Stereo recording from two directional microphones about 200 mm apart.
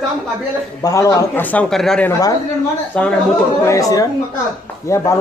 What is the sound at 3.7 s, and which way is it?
A man's voice, 15° left (ahead or behind).